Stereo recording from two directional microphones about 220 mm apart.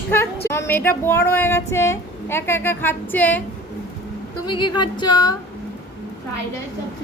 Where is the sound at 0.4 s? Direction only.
10° left (ahead or behind).